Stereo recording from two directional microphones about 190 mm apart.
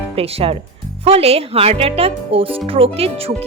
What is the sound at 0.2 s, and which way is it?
Speech, 30° right (ahead or behind).